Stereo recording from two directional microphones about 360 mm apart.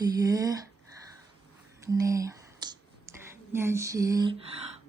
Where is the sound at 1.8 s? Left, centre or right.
Centre.